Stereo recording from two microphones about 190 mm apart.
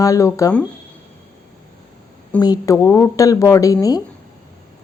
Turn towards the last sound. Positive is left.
turn(degrees=20)  # may be behind; listen again after turning